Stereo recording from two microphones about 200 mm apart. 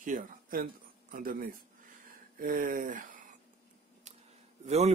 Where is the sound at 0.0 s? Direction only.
45° right (ahead or behind).